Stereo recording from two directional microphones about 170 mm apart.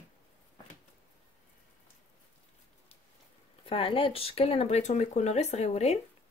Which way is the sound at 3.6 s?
35° left (ahead or behind).